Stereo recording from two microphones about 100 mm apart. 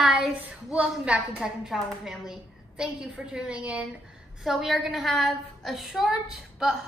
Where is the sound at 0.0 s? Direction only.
10° right (ahead or behind).